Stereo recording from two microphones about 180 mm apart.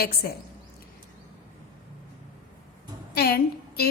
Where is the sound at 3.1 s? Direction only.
60° left (ahead or behind).